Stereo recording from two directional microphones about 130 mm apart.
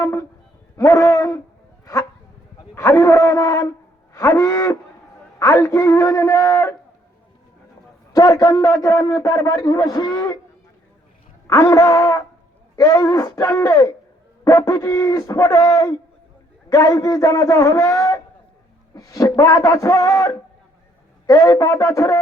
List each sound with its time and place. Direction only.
0.0 s music: 20° left (ahead or behind)
0.8 s a sound: 25° left (ahead or behind)
8.1 s a man's voice: 25° left (ahead or behind)
11.4 s a man's voice: 20° left (ahead or behind)